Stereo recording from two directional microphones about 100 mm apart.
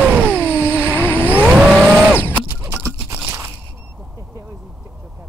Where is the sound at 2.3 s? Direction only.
20° right (ahead or behind).